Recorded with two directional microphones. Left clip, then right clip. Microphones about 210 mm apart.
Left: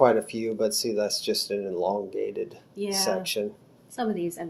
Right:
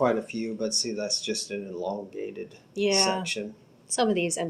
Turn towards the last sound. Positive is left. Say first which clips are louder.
# right 4 dB
turn(degrees=-45)  # may be behind; listen again after turning